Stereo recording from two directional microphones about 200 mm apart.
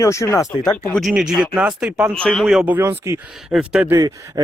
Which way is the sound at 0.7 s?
5° left (ahead or behind).